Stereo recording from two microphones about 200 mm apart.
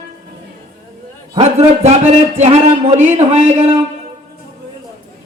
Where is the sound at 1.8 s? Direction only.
35° right (ahead or behind).